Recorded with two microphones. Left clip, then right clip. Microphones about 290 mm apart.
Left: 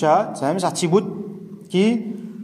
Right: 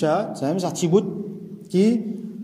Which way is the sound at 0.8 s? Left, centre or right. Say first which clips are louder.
Right 1 dB; left.